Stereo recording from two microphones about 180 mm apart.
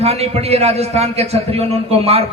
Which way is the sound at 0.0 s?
35° right (ahead or behind).